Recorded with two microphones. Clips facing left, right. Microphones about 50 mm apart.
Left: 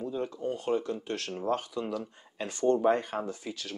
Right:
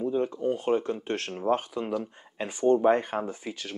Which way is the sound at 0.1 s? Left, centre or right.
Right.